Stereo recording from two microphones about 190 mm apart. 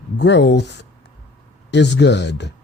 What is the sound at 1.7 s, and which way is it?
Speech, 65° left (ahead or behind).